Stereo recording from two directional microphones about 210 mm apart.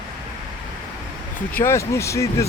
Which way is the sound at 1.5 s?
15° left (ahead or behind).